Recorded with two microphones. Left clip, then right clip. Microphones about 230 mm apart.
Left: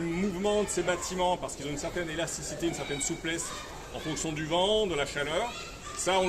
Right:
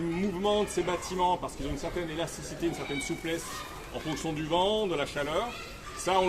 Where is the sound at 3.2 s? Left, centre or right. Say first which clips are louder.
Even; centre.